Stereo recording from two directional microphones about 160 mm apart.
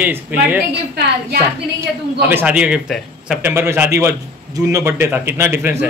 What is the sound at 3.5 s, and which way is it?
A man's voice, 15° right (ahead or behind).